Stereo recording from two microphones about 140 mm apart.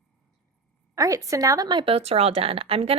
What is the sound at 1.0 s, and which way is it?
A woman's voice, 25° right (ahead or behind).